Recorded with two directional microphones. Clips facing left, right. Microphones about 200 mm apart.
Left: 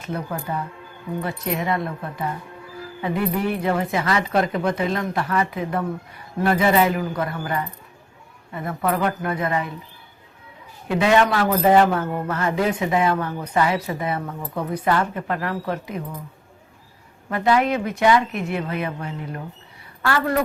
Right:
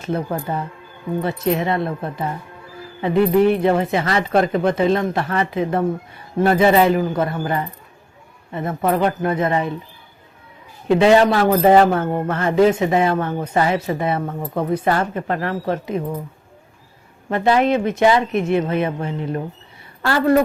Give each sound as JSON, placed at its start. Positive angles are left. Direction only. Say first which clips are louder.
{"t": 0.0, "sound": "speech", "louder": "right 5 dB", "side_deg": -30}
{"t": 10.8, "sound": "speech", "louder": "right 5 dB", "side_deg": -30}
{"t": 14.3, "sound": "speech", "louder": "right 5 dB", "side_deg": -50}
{"t": 14.7, "sound": "speech", "louder": "right 1 dB", "side_deg": -30}
{"t": 17.2, "sound": "speech", "louder": "right 3 dB", "side_deg": -30}